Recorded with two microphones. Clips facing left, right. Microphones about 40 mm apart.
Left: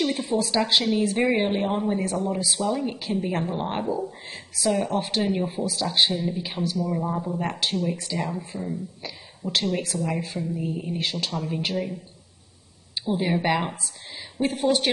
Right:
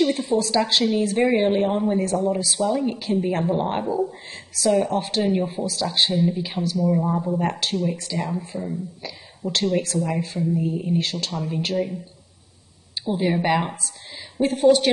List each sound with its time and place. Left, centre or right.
0.0 s speech: centre
6.8 s speech: centre
11.3 s speech: centre
13.0 s speech: centre